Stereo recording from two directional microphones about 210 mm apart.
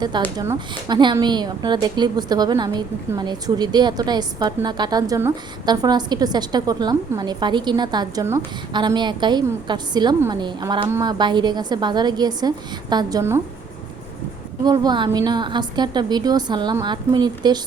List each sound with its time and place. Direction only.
0.3 s a woman's voice: 20° right (ahead or behind)
14.6 s a woman's voice: 20° right (ahead or behind)